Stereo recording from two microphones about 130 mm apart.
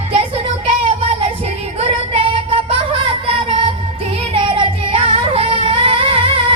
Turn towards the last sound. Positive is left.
turn(degrees=-45)  # may be behind; listen again after turning